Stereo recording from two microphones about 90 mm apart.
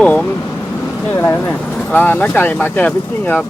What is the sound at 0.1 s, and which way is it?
Speech, 25° left (ahead or behind).